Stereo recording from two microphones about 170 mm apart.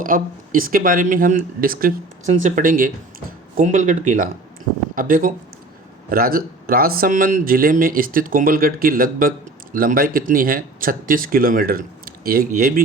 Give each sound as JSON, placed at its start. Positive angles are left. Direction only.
{"t": 0.0, "sound": "speech", "side_deg": -55}